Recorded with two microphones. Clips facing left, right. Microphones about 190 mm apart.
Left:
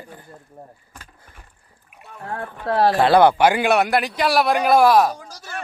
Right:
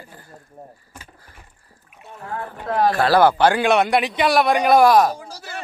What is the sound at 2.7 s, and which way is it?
Speech, 35° left (ahead or behind).